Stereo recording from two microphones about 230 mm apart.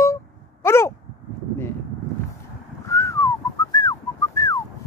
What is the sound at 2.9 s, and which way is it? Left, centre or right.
Whistling, centre.